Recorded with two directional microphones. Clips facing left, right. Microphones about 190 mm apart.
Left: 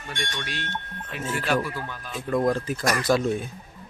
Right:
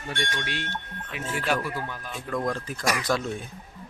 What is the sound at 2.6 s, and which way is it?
Speech, 5° left (ahead or behind).